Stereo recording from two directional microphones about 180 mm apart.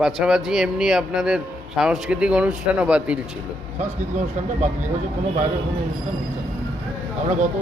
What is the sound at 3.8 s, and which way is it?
Speech, 40° right (ahead or behind).